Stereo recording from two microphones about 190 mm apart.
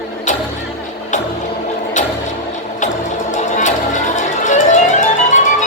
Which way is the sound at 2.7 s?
40° left (ahead or behind).